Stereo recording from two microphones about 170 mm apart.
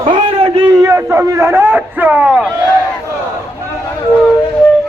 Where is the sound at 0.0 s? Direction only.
35° right (ahead or behind).